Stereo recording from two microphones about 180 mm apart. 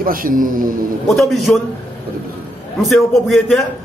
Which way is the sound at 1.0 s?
Centre (ahead or behind).